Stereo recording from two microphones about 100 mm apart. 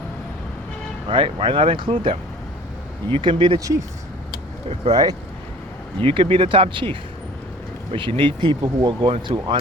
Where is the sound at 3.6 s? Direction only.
35° right (ahead or behind).